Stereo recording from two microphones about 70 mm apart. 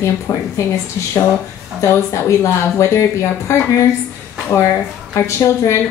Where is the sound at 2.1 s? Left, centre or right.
Left.